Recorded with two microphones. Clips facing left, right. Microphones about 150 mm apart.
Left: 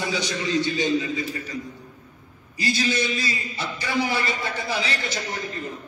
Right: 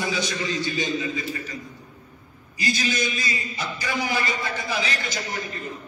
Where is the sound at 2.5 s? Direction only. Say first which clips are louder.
Left 2 dB; 30° left (ahead or behind).